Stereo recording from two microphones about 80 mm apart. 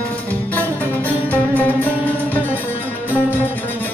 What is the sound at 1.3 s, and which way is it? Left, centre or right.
Music, centre.